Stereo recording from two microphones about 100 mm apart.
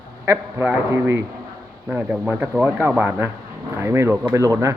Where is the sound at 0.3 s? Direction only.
25° right (ahead or behind).